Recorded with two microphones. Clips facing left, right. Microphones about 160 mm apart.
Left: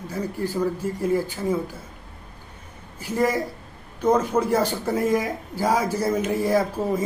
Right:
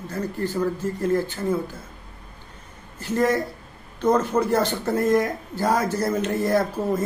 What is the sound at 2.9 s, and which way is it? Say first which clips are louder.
Speech: right 1 dB; 10° left (ahead or behind).